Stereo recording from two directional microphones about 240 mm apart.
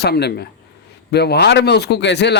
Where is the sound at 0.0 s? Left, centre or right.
Left.